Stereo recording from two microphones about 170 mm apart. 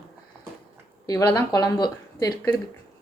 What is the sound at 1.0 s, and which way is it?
A woman's voice, 20° left (ahead or behind).